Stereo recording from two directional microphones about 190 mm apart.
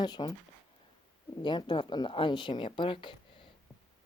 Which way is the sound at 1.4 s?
25° left (ahead or behind).